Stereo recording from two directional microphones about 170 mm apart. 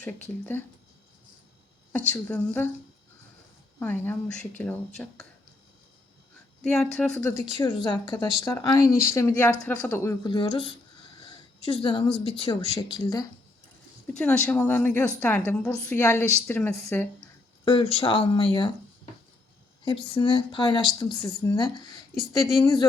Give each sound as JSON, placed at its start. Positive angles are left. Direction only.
{"t": 0.0, "sound": "a woman's voice", "side_deg": 10}
{"t": 1.9, "sound": "a woman's voice", "side_deg": 10}
{"t": 3.8, "sound": "a woman's voice", "side_deg": 10}
{"t": 6.7, "sound": "speech", "side_deg": 5}
{"t": 7.5, "sound": "a woman's voice", "side_deg": 25}
{"t": 10.2, "sound": "speech", "side_deg": 30}
{"t": 14.1, "sound": "a woman's voice", "side_deg": 5}
{"t": 17.7, "sound": "speech", "side_deg": 30}
{"t": 19.8, "sound": "speech", "side_deg": 30}